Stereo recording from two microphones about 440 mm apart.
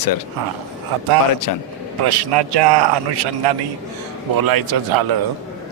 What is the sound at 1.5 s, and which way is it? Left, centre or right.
Speech, left.